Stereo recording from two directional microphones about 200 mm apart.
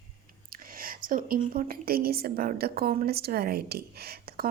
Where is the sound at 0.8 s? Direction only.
45° right (ahead or behind).